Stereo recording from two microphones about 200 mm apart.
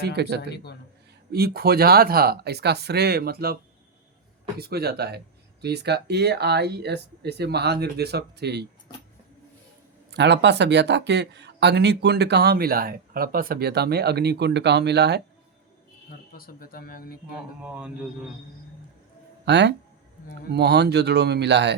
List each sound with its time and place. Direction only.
0.0 s speech: 55° right (ahead or behind)
0.5 s a man's voice: 55° left (ahead or behind)
1.3 s speech: 50° right (ahead or behind)
10.1 s speech: 60° right (ahead or behind)
16.3 s speech: 50° left (ahead or behind)
17.6 s speech: 5° right (ahead or behind)
19.5 s speech: 60° right (ahead or behind)